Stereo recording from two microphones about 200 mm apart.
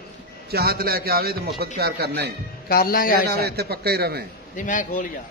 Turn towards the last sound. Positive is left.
turn(degrees=40)  # may be behind; listen again after turning